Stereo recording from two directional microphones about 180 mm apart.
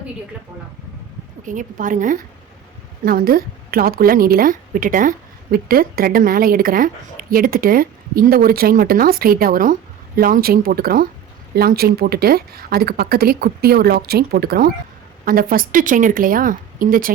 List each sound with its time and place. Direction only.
1.5 s a woman's voice: 45° right (ahead or behind)